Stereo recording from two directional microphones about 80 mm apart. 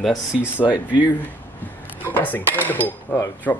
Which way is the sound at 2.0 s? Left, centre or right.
Left.